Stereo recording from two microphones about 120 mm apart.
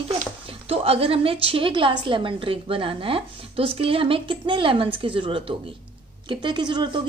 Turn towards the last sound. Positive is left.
turn(degrees=-40)  # may be behind; listen again after turning